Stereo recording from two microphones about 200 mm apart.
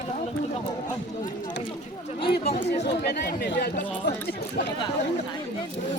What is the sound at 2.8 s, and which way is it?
Speech, 55° left (ahead or behind).